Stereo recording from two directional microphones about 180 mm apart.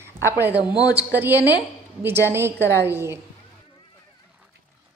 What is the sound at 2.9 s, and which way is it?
Speech, 15° right (ahead or behind).